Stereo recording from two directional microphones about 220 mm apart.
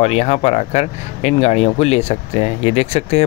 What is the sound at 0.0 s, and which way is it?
Speech, 30° left (ahead or behind).